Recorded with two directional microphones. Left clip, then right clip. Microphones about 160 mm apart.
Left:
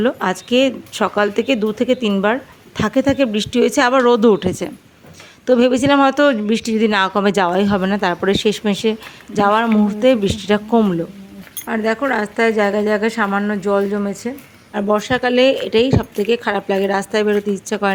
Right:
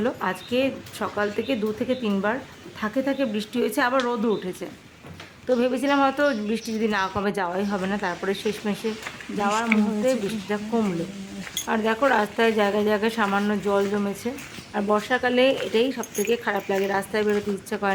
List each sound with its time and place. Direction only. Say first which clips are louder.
0.0 s a woman's voice: left 8 dB; 45° left (ahead or behind)
11.7 s a woman's voice: left 3 dB; 30° left (ahead or behind)